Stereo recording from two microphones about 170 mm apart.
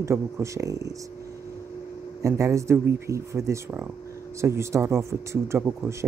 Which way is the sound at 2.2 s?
20° right (ahead or behind).